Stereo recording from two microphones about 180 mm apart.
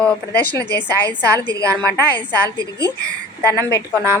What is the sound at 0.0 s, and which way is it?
Speech, 5° left (ahead or behind).